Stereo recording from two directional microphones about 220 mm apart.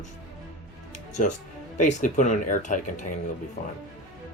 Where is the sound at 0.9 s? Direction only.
35° left (ahead or behind).